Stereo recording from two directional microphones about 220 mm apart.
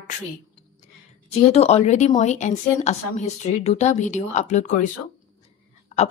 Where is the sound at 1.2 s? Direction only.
30° left (ahead or behind).